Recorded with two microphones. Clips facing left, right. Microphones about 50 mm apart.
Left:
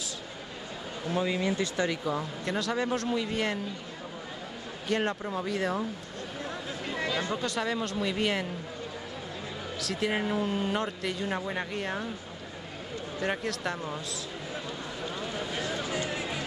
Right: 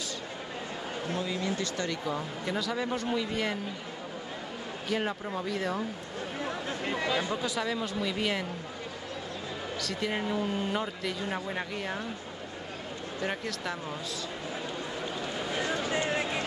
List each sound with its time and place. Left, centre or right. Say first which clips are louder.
1.1 s speech: left 5 dB; left; by 3.5 s centre
4.8 s speech: left 3 dB; centre
7.1 s speech: left 1 dB; centre
9.8 s speech: left 3 dB; centre
13.2 s speech: left 3 dB; centre
15.4 s a sound: right 4 dB; centre
15.9 s music: right 3 dB; right